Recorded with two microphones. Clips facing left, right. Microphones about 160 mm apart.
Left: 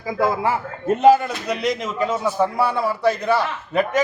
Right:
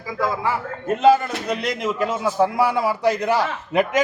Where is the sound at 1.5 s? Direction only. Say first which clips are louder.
Left 1 dB; 5° right (ahead or behind).